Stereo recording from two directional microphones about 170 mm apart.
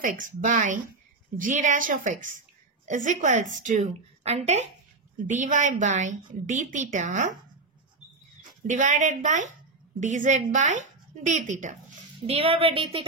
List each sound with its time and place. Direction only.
0.0 s a woman's voice: 50° right (ahead or behind)
8.6 s a woman's voice: 50° right (ahead or behind)
12.4 s a woman's voice: 35° right (ahead or behind)